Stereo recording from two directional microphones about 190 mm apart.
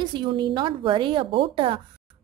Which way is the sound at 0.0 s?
25° right (ahead or behind).